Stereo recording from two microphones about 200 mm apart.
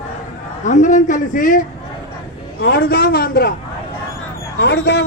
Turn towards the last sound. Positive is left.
turn(degrees=60)  # may be behind; listen again after turning